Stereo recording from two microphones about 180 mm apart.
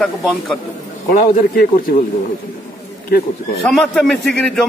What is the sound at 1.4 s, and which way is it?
Speech, 50° left (ahead or behind).